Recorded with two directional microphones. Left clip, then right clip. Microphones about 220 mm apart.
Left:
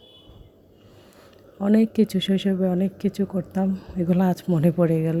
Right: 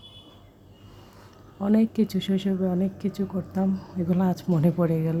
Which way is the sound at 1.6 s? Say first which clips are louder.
Left 3 dB; 25° left (ahead or behind).